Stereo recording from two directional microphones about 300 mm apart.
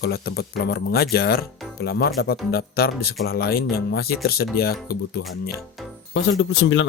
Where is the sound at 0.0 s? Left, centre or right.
Left.